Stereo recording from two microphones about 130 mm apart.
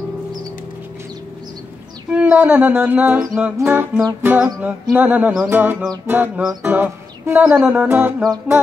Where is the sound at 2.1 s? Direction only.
10° right (ahead or behind).